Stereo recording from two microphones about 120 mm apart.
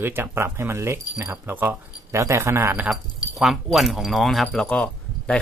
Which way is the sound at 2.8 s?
Centre (ahead or behind).